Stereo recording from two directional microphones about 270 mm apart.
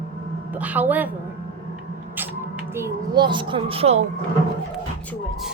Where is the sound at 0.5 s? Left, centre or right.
Centre.